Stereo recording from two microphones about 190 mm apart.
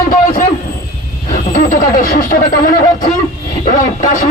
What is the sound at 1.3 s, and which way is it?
Speech, 45° left (ahead or behind).